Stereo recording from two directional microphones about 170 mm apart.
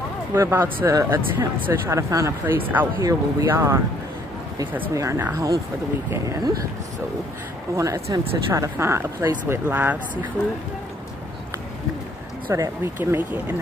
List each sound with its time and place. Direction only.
0.3 s speech: 15° right (ahead or behind)
4.9 s speech: 15° right (ahead or behind)
7.7 s speech: 20° right (ahead or behind)
10.4 s speech: 15° left (ahead or behind)
12.4 s speech: 15° right (ahead or behind)